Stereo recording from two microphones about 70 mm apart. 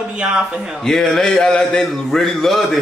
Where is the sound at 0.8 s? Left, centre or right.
Centre.